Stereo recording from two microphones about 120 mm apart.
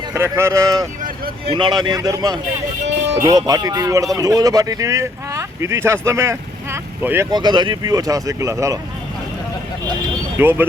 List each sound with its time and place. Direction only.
0.1 s speech: 20° right (ahead or behind)
1.5 s speech: 40° right (ahead or behind); by 7.3 s 20° right (ahead or behind)
7.3 s speech: 35° right (ahead or behind)
10.3 s speech: 20° right (ahead or behind)